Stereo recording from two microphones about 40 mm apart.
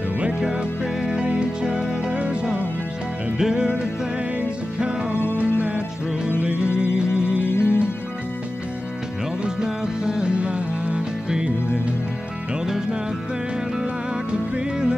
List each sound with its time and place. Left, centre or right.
0.2 s music: right
3.3 s music: centre
6.4 s music: right
9.4 s music: centre
14.3 s music: right